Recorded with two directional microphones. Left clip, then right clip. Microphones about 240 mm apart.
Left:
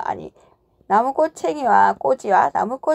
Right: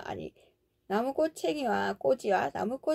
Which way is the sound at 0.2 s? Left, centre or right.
Centre.